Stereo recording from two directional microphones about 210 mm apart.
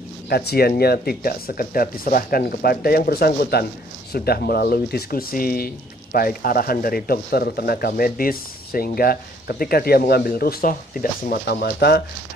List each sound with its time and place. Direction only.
0.3 s speech: 50° left (ahead or behind)